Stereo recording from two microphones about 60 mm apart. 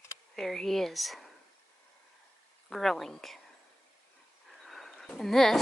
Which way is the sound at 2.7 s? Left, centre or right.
Centre.